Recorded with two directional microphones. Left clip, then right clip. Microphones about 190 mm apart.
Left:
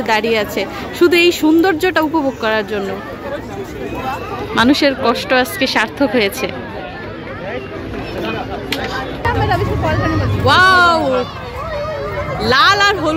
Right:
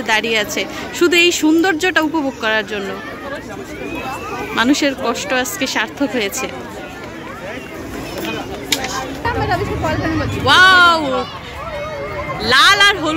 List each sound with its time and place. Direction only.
0.0 s speech: centre (ahead or behind)
4.6 s speech: centre (ahead or behind)
9.2 s hubbub: 55° right (ahead or behind)
10.4 s speech: 5° left (ahead or behind)
12.4 s speech: 5° left (ahead or behind)